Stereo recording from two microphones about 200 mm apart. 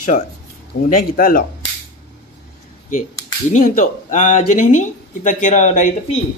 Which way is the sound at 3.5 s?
40° left (ahead or behind).